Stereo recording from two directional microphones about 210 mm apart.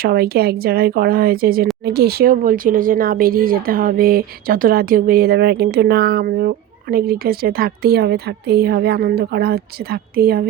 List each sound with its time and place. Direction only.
0.0 s speech: 45° right (ahead or behind)